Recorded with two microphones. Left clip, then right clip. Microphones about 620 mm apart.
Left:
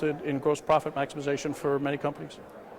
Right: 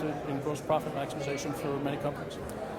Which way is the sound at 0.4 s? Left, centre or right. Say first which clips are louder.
Left 7 dB; left.